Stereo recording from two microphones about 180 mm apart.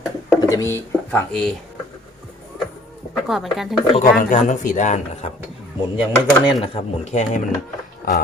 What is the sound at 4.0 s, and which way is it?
A man's voice, 45° left (ahead or behind).